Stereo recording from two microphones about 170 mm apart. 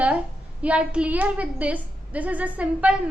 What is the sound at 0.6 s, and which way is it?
A woman's voice, 5° right (ahead or behind).